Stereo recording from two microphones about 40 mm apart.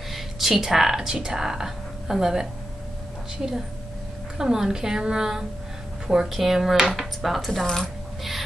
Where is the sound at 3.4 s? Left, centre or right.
Right.